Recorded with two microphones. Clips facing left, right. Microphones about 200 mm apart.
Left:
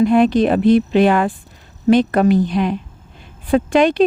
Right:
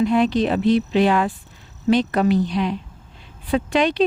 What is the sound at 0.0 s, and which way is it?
Speech, 50° left (ahead or behind).